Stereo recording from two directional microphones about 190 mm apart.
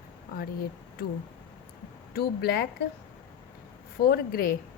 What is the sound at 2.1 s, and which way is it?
Speech, 55° left (ahead or behind).